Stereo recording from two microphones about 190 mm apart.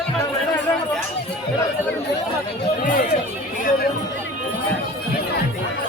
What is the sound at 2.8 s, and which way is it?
Speech, 45° left (ahead or behind).